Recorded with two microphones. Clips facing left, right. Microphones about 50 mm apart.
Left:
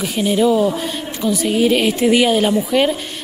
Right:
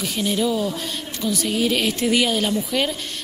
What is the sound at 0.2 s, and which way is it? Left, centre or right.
Speech, centre.